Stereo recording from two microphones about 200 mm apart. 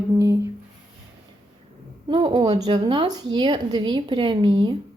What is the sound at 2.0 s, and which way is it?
Speech, 25° right (ahead or behind).